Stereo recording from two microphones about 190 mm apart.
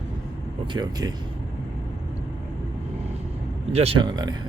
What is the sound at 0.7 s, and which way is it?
Speech, 20° right (ahead or behind).